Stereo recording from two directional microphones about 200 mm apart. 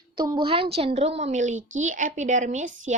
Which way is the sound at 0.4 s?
25° right (ahead or behind).